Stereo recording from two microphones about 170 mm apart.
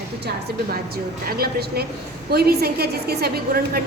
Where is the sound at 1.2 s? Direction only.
65° right (ahead or behind).